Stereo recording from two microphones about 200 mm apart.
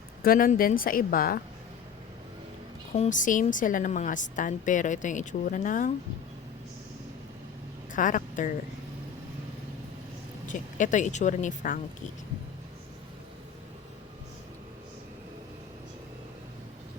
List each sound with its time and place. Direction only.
0.2 s a woman's voice: 45° left (ahead or behind)
2.9 s a woman's voice: 35° left (ahead or behind)
7.9 s speech: 40° left (ahead or behind)
10.4 s a woman's voice: 40° left (ahead or behind)